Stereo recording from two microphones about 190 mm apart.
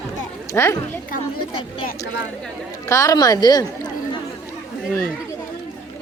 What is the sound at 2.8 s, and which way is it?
A woman's voice, 15° left (ahead or behind).